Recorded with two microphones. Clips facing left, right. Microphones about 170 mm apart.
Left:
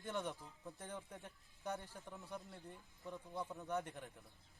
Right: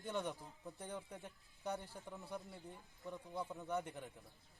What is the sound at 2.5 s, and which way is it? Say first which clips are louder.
A man's voice: right 1 dB; centre (ahead or behind).